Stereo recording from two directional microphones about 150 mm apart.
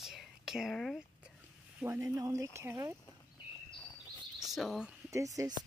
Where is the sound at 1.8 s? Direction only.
15° right (ahead or behind).